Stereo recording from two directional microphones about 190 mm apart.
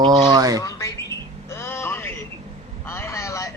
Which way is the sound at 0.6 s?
15° left (ahead or behind).